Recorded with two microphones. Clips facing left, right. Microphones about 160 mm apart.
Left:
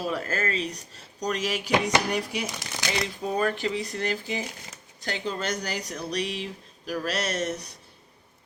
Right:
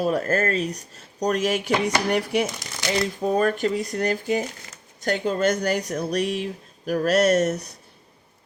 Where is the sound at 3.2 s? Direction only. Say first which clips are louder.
Right 5 dB; 45° right (ahead or behind).